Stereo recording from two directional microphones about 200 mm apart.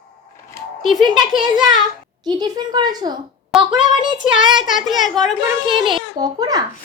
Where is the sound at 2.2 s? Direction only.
20° right (ahead or behind).